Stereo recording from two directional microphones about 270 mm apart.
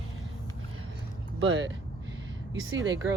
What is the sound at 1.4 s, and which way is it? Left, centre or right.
Speech, right.